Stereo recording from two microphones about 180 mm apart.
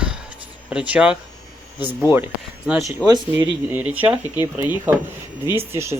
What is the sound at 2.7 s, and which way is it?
Speech, centre (ahead or behind).